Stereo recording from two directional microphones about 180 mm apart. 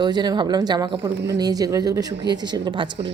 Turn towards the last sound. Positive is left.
turn(degrees=-25)  # may be behind; listen again after turning